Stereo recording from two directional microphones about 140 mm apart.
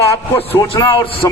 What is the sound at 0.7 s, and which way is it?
Speech, 35° left (ahead or behind).